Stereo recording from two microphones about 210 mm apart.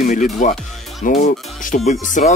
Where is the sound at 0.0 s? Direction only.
35° left (ahead or behind).